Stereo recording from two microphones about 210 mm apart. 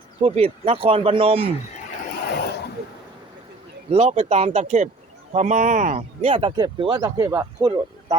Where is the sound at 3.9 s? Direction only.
30° right (ahead or behind).